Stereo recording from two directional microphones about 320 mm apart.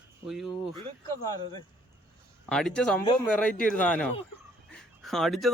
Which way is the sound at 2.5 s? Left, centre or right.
Centre.